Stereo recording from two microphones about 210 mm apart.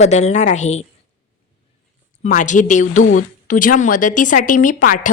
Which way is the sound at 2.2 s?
35° left (ahead or behind).